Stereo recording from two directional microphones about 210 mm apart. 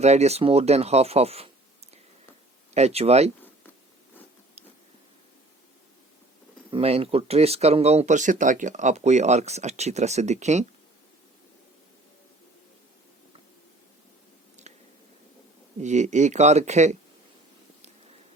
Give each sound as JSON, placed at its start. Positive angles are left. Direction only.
{"t": 0.0, "sound": "speech", "side_deg": -30}
{"t": 6.7, "sound": "speech", "side_deg": -25}
{"t": 14.6, "sound": "squish", "side_deg": -35}
{"t": 15.8, "sound": "speech", "side_deg": -35}